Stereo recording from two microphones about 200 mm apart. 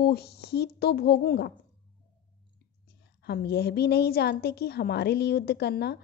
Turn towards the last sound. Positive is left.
turn(degrees=55)  # may be behind; listen again after turning